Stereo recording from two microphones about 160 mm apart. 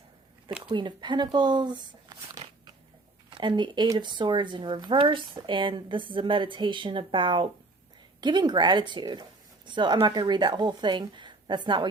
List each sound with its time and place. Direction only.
0.7 s a woman's voice: 30° right (ahead or behind)